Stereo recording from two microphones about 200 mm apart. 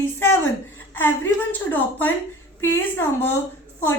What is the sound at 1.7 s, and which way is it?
A woman's voice, 10° left (ahead or behind).